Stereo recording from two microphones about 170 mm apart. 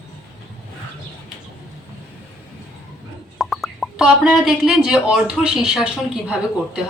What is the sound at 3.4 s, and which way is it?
Speech, centre (ahead or behind).